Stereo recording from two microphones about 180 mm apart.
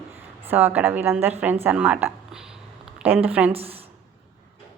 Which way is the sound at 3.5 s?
30° right (ahead or behind).